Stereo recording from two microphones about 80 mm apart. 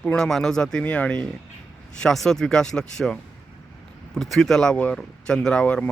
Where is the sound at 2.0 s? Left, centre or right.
Centre.